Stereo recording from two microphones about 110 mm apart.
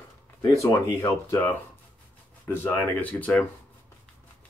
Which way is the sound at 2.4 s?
20° left (ahead or behind).